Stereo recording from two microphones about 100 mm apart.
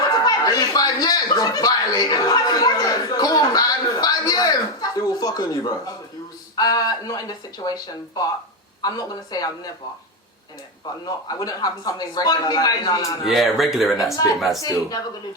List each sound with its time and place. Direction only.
0.0 s speech: 40° left (ahead or behind)
6.6 s speech: 40° left (ahead or behind)
8.8 s speech: 40° left (ahead or behind)
10.8 s speech: 40° left (ahead or behind)
13.2 s speech: centre (ahead or behind)
14.6 s speech: 40° left (ahead or behind)